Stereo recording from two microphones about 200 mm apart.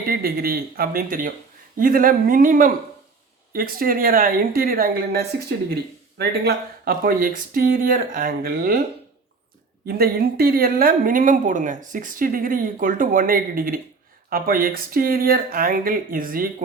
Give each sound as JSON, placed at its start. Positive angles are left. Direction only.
{"t": 0.1, "sound": "a woman's voice", "side_deg": -50}
{"t": 9.8, "sound": "a woman's voice", "side_deg": -50}